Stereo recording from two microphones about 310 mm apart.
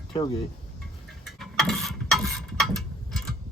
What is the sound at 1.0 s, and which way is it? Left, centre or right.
Mechanisms, centre.